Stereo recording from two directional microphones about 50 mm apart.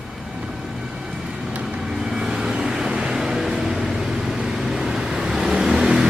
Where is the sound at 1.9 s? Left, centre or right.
Centre.